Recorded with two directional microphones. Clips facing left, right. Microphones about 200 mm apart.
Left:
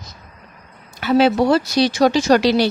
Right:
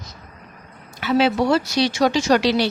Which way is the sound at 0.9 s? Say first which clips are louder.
Left 3 dB; 45° left (ahead or behind).